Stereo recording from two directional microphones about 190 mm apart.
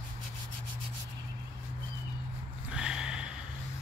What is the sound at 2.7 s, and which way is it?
Snort, 5° right (ahead or behind).